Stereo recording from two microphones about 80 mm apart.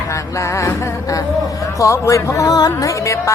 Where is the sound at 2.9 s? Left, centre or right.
Left.